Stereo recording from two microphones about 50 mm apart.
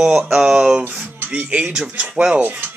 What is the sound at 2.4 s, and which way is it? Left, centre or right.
Speech, right.